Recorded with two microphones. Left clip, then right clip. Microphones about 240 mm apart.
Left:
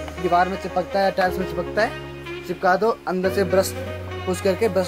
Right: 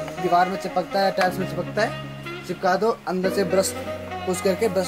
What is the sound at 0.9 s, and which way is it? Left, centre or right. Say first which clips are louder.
Speech: left 1 dB; centre.